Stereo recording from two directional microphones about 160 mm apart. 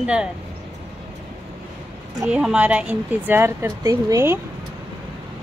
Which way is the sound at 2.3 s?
5° right (ahead or behind).